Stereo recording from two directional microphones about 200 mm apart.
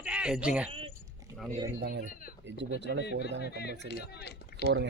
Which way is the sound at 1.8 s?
55° right (ahead or behind).